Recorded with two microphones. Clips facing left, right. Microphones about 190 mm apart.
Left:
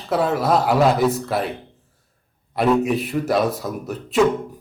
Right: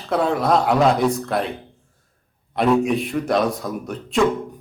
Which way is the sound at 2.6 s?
Centre (ahead or behind).